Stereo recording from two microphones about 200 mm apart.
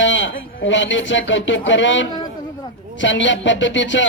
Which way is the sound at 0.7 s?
65° left (ahead or behind).